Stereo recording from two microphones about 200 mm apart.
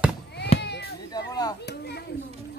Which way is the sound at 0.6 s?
55° left (ahead or behind).